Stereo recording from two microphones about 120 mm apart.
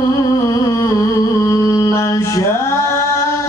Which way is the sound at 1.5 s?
25° left (ahead or behind).